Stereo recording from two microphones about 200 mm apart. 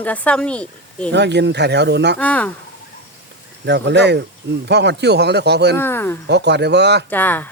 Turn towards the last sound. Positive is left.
turn(degrees=10)  # may be behind; listen again after turning